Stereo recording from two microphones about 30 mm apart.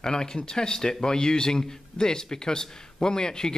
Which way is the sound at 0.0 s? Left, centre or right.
Left.